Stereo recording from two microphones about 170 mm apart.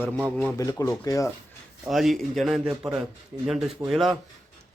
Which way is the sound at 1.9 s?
Centre (ahead or behind).